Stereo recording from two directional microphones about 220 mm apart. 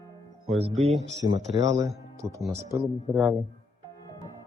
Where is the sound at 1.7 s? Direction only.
15° right (ahead or behind).